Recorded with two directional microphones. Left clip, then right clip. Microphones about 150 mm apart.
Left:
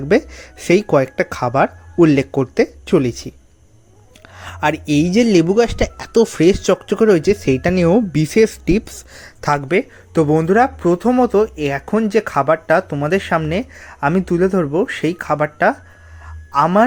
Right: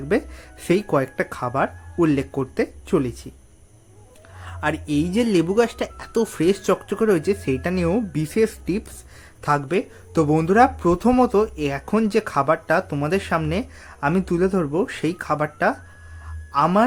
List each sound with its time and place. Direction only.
0.1 s speech: 35° left (ahead or behind)
4.4 s speech: 40° left (ahead or behind)
9.6 s speech: 15° left (ahead or behind)